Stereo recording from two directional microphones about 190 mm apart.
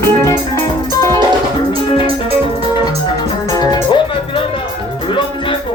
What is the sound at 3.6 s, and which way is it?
Music, 25° left (ahead or behind).